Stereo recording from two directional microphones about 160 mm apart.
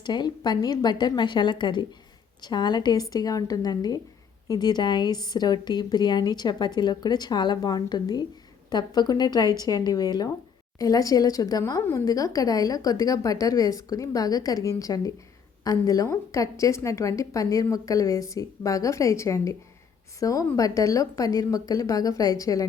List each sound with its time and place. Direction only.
0.0 s a woman's voice: 25° left (ahead or behind)